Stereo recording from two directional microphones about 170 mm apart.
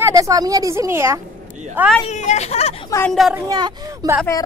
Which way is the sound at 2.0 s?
45° left (ahead or behind).